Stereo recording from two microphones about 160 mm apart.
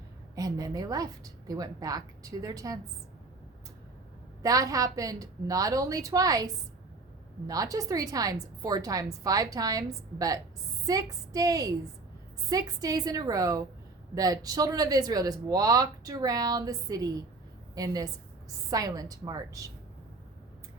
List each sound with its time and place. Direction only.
0.3 s speech: 20° right (ahead or behind)
4.4 s speech: 20° right (ahead or behind)